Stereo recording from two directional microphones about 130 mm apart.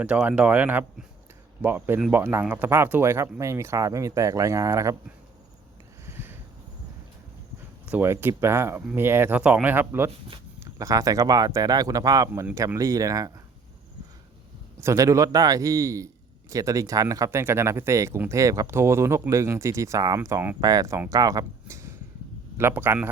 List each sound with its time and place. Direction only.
0.0 s speech: 10° right (ahead or behind)
6.1 s a sound: 15° right (ahead or behind)
7.9 s speech: 15° right (ahead or behind)
14.8 s speech: 25° right (ahead or behind)